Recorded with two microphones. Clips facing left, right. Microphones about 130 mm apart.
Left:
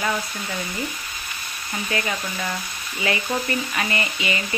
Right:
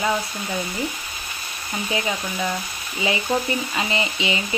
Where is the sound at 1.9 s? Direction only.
10° right (ahead or behind).